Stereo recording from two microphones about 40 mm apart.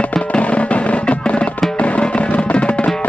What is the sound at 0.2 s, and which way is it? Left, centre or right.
Music, left.